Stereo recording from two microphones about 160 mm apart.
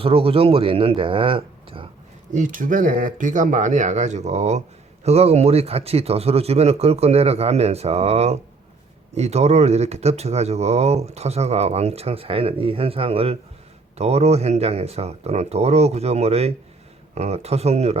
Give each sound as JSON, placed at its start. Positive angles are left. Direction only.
{"t": 0.0, "sound": "speech", "side_deg": -35}
{"t": 2.3, "sound": "speech", "side_deg": -55}